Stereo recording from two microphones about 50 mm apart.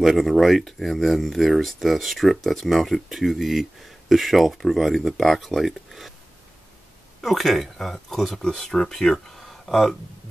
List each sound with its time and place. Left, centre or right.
0.0 s speech: centre
7.2 s speech: centre
9.5 s a sound: centre